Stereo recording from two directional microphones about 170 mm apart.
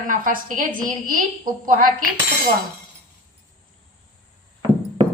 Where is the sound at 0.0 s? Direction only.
50° right (ahead or behind).